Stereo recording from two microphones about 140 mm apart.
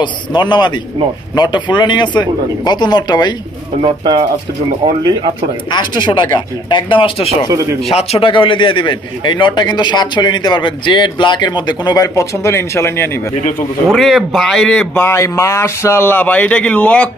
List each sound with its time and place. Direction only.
0.0 s a man's voice: 35° left (ahead or behind)
3.8 s speech: 30° right (ahead or behind)
5.7 s a man's voice: 35° left (ahead or behind); by 13.2 s 20° left (ahead or behind)
13.8 s speech: centre (ahead or behind)